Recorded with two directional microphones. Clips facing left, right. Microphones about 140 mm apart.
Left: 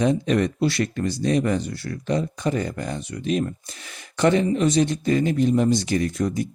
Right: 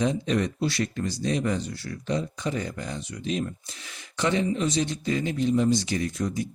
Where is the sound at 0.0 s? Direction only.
60° left (ahead or behind).